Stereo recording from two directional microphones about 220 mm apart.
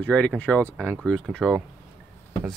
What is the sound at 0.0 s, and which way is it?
Speech, 5° left (ahead or behind).